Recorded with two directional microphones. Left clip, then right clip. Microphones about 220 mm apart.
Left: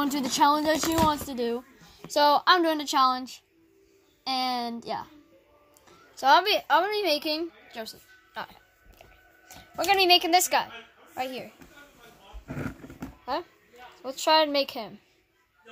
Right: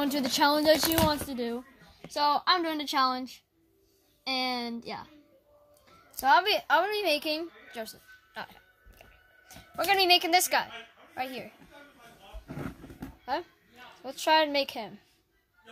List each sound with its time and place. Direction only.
0.0 s a woman's voice: centre (ahead or behind)
1.3 s a woman's voice: 20° left (ahead or behind)
6.4 s a woman's voice: 5° left (ahead or behind)
7.7 s music: 5° left (ahead or behind)
9.5 s a woman's voice: 5° left (ahead or behind)
13.2 s a woman's voice: 5° left (ahead or behind)